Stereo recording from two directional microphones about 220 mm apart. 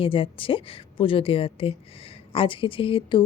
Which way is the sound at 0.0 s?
25° left (ahead or behind).